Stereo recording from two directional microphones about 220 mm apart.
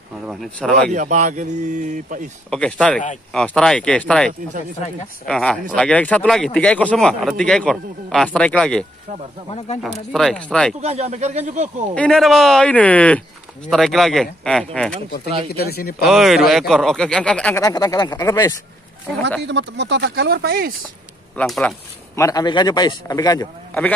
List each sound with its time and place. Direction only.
0.3 s speech: centre (ahead or behind)
0.9 s speech: 35° right (ahead or behind)
2.5 s speech: 5° left (ahead or behind)
10.1 s speech: 5° left (ahead or behind)
10.8 s speech: 30° right (ahead or behind)
11.9 s speech: 5° left (ahead or behind)
15.5 s speech: 45° left (ahead or behind)
16.0 s speech: centre (ahead or behind); by 18.5 s 15° left (ahead or behind)
19.4 s speech: 55° right (ahead or behind)
21.4 s speech: 5° left (ahead or behind)